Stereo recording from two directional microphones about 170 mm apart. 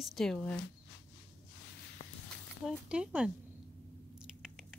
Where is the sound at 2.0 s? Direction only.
35° left (ahead or behind).